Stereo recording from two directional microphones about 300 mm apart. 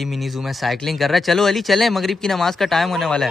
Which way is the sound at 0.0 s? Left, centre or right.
Centre.